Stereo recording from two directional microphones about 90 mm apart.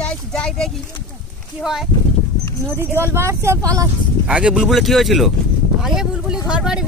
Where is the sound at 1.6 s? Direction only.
5° right (ahead or behind).